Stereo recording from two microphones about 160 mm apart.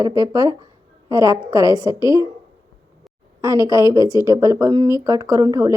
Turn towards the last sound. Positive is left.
turn(degrees=-20)  # may be behind; listen again after turning